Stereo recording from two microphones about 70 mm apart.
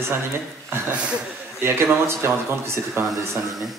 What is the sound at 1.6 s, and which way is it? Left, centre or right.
Speech, right.